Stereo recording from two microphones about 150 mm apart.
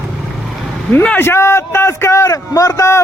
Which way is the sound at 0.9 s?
10° left (ahead or behind).